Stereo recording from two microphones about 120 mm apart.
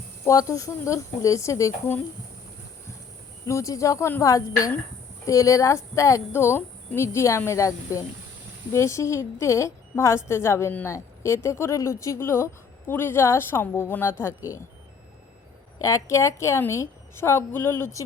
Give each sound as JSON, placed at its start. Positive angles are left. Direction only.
{"t": 0.3, "sound": "speech", "side_deg": 25}
{"t": 3.4, "sound": "speech", "side_deg": 25}
{"t": 15.8, "sound": "speech", "side_deg": 25}